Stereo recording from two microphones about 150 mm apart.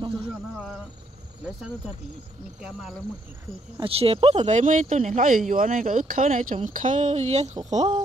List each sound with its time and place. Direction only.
2.6 s speech: centre (ahead or behind)
3.8 s speech: 40° right (ahead or behind)
4.5 s speech: 55° right (ahead or behind)